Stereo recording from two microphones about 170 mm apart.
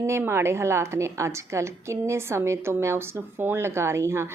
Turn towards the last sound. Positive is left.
turn(degrees=-15)  # may be behind; listen again after turning